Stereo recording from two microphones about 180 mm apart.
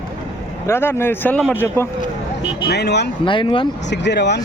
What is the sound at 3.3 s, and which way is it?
Speech, 30° left (ahead or behind).